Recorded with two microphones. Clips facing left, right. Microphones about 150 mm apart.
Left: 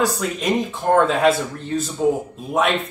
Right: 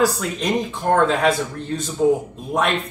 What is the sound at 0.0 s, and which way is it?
Speech, centre (ahead or behind).